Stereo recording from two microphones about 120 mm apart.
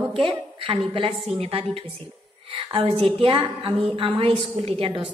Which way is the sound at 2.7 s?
45° right (ahead or behind).